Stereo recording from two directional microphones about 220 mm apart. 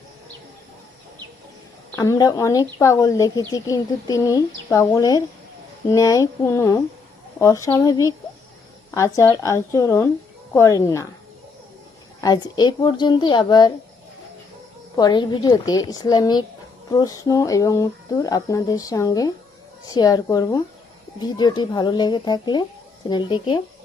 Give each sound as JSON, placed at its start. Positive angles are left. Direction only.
{"t": 1.9, "sound": "a woman's voice", "side_deg": 15}
{"t": 12.2, "sound": "a woman's voice", "side_deg": 20}
{"t": 14.9, "sound": "a woman's voice", "side_deg": 20}